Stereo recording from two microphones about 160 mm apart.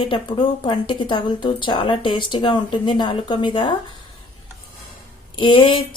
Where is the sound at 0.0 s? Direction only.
30° left (ahead or behind).